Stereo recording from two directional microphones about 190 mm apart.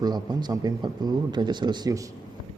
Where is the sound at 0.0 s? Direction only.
20° right (ahead or behind).